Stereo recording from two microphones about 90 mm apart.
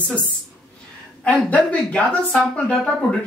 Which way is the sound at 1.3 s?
15° left (ahead or behind).